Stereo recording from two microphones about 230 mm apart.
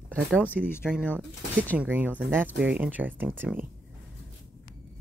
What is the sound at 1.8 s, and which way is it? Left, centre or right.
Speech, centre.